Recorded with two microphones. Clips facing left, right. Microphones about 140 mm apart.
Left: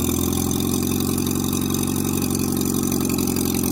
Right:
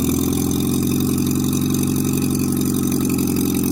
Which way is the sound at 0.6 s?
70° left (ahead or behind).